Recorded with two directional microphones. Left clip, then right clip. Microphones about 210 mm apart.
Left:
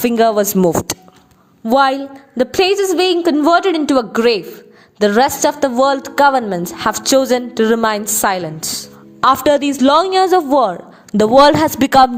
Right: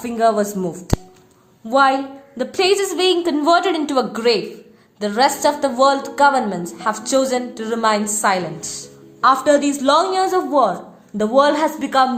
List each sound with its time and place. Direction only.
0.0 s a woman's voice: 45° left (ahead or behind)